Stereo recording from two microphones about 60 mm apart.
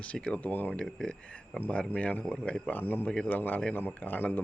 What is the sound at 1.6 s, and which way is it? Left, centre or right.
Speech, left.